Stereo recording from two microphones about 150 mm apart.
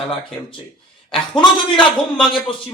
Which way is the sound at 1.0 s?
35° left (ahead or behind).